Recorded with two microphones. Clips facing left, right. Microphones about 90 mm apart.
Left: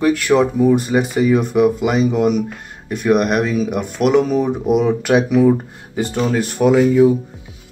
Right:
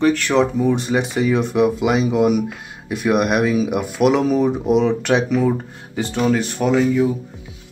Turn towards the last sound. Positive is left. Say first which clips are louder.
# left 5 dB
turn(degrees=5)  # may be behind; listen again after turning